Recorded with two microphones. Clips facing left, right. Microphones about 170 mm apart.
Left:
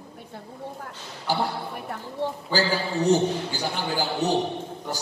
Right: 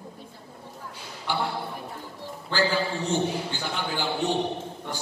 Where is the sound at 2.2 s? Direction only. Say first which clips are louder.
Left 13 dB; 65° left (ahead or behind).